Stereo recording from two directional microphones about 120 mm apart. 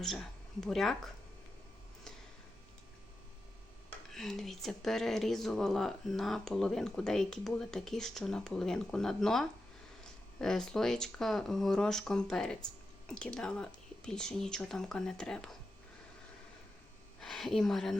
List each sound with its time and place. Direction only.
0.0 s speech: 5° left (ahead or behind)
4.1 s speech: 5° left (ahead or behind)
17.2 s a woman's voice: 5° left (ahead or behind)